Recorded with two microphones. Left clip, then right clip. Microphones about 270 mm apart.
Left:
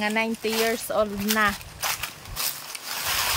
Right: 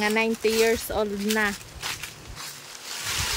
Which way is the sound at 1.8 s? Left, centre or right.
Left.